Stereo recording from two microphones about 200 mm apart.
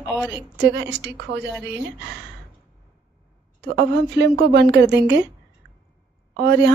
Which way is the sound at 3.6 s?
55° right (ahead or behind).